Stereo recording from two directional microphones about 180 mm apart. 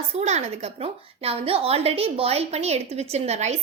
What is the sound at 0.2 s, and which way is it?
A woman's voice, 35° right (ahead or behind).